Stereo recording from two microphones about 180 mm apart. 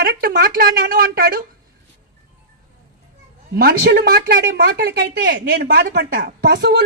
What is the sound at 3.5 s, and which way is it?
Speech, 55° right (ahead or behind).